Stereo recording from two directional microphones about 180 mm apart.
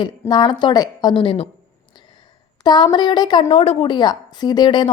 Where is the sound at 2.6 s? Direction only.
25° left (ahead or behind).